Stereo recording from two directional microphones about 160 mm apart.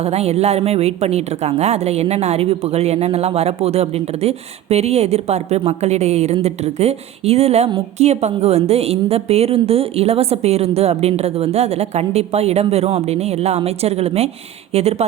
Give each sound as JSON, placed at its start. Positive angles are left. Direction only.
{"t": 0.0, "sound": "a woman's voice", "side_deg": -40}